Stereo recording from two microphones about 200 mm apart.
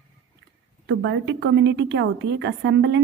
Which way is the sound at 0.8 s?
65° right (ahead or behind).